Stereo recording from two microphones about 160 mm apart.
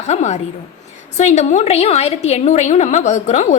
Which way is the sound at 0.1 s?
45° left (ahead or behind).